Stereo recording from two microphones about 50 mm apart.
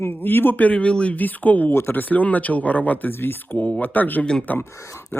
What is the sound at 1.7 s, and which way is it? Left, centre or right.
Speech, left.